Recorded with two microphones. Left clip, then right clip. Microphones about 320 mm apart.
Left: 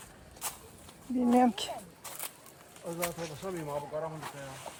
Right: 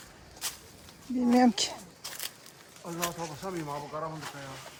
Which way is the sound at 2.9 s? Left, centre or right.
Left.